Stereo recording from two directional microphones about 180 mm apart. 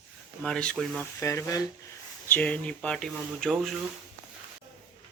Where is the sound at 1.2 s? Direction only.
15° left (ahead or behind); by 3.8 s centre (ahead or behind).